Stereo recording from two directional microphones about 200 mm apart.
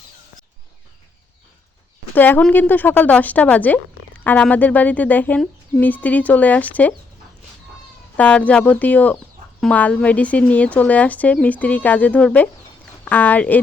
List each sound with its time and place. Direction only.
2.1 s a woman's voice: 10° left (ahead or behind)
8.1 s a woman's voice: 5° left (ahead or behind)